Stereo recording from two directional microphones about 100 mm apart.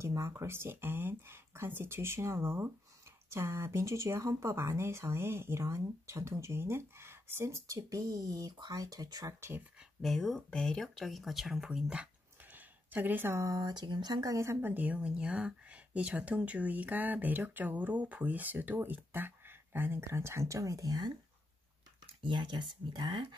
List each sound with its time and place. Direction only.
0.0 s speech: 30° right (ahead or behind)
10.0 s speech: centre (ahead or behind); by 21.1 s 40° right (ahead or behind)
22.2 s speech: 55° right (ahead or behind)